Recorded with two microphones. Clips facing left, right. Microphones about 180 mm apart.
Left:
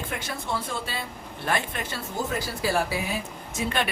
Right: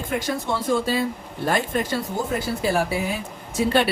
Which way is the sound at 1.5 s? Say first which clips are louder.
Right 7 dB; 40° right (ahead or behind).